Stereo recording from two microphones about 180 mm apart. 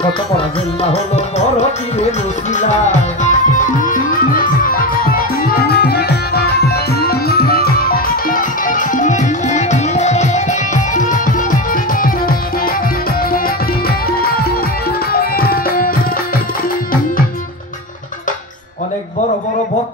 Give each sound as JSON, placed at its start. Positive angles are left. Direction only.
{"t": 2.5, "sound": "music", "side_deg": 40}
{"t": 13.8, "sound": "music", "side_deg": 55}
{"t": 15.1, "sound": "tabla", "side_deg": 55}